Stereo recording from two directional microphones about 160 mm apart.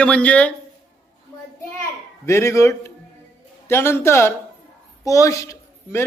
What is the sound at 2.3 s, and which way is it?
A woman's voice, 15° left (ahead or behind).